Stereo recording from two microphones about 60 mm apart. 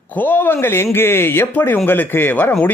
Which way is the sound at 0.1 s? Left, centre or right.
Left.